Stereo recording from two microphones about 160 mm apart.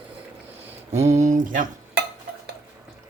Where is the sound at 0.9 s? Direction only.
45° right (ahead or behind).